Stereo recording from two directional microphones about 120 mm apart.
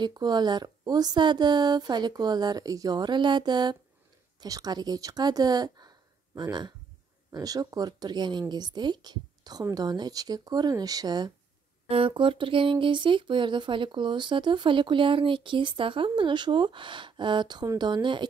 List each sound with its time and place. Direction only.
0.0 s speech: 35° right (ahead or behind)
11.9 s speech: 45° right (ahead or behind)